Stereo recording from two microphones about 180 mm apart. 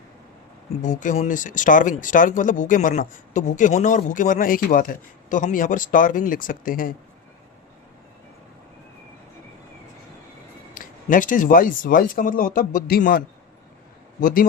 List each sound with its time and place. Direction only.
0.8 s speech: 45° left (ahead or behind)
10.8 s a man's voice: 50° left (ahead or behind)